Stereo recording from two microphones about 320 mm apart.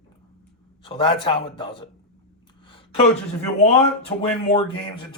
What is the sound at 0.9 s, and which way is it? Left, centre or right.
Speech, centre.